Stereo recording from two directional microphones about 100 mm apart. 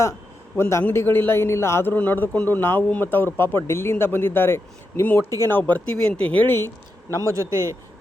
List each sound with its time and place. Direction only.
0.5 s a man's voice: 25° left (ahead or behind)
7.2 s a man's voice: 35° right (ahead or behind)